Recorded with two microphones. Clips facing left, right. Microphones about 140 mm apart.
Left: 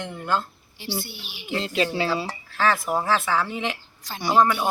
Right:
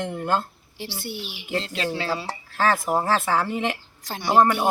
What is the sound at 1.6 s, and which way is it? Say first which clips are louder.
Speech: left 3 dB; 10° left (ahead or behind).